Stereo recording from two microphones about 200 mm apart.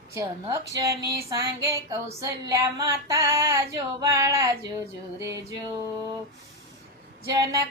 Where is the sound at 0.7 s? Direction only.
15° right (ahead or behind).